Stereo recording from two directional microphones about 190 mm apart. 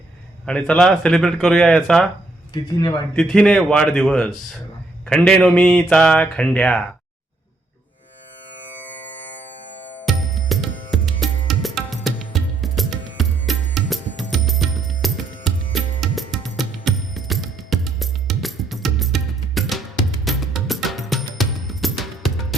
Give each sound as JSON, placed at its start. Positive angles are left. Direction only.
{"t": 0.4, "sound": "speech", "side_deg": 5}
{"t": 2.5, "sound": "speech", "side_deg": 20}
{"t": 3.2, "sound": "speech", "side_deg": 5}
{"t": 9.9, "sound": "music", "side_deg": 5}